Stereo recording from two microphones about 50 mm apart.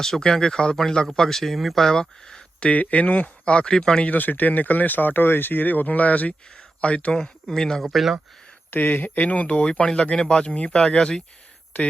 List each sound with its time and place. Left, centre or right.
0.0 s speech: centre
2.6 s speech: left; by 4.0 s centre
4.0 s speech: left
7.1 s speech: centre
7.9 s speech: centre
8.7 s speech: left; by 11.2 s centre
11.7 s speech: left